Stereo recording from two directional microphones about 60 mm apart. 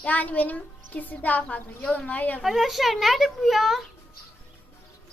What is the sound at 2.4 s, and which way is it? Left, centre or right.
Speech, centre.